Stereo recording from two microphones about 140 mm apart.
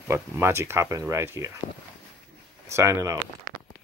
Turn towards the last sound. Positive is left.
turn(degrees=-20)  # may be behind; listen again after turning